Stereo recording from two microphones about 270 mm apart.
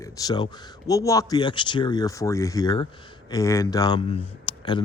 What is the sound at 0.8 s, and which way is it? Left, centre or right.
Speech, centre.